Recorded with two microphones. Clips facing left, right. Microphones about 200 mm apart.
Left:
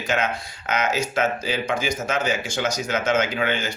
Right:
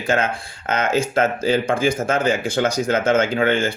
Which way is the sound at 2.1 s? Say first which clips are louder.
Right 5 dB; 55° right (ahead or behind).